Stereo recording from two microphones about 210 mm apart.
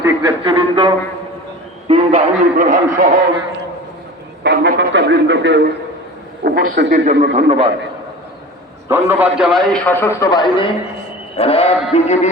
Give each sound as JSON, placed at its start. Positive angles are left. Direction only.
{"t": 0.0, "sound": "a sound", "side_deg": -20}
{"t": 1.9, "sound": "a man's voice", "side_deg": -30}
{"t": 4.4, "sound": "a man's voice", "side_deg": -55}
{"t": 6.4, "sound": "a man's voice", "side_deg": -45}
{"t": 8.9, "sound": "a man's voice", "side_deg": -10}